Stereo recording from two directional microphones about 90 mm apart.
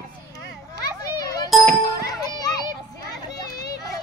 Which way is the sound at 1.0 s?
45° left (ahead or behind).